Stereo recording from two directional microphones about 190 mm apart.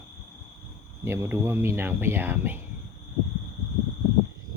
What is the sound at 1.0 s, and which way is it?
Speech, 15° right (ahead or behind).